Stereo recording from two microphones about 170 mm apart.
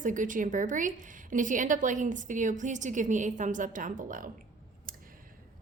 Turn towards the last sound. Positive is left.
turn(degrees=-50)  # may be behind; listen again after turning